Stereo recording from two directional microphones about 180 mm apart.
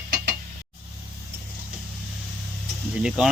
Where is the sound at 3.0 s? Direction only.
5° right (ahead or behind).